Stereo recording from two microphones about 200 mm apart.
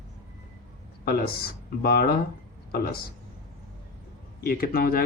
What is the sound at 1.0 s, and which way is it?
Speech, 50° left (ahead or behind).